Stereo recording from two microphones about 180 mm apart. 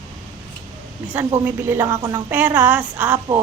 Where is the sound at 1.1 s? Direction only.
15° right (ahead or behind).